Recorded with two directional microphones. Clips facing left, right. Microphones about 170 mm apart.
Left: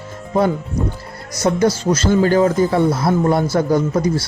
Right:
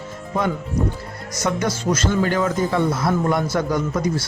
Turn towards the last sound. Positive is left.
turn(degrees=35)  # may be behind; listen again after turning